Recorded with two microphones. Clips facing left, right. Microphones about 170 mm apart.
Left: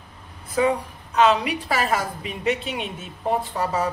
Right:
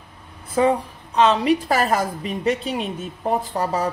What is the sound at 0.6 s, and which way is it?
A woman's voice, 35° right (ahead or behind).